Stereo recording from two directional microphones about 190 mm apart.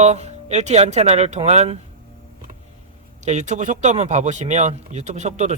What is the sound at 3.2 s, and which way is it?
Speech, 40° right (ahead or behind).